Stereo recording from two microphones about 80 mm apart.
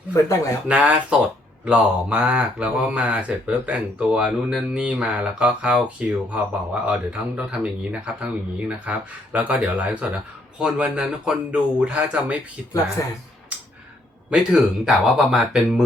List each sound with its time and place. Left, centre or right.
0.7 s speech: centre
13.0 s speech: left
14.3 s speech: centre